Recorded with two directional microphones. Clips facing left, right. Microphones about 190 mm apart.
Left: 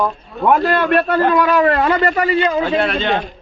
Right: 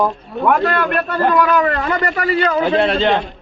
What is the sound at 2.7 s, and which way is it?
Speech, 30° right (ahead or behind).